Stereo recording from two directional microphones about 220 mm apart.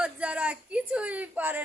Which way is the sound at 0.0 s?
5° right (ahead or behind).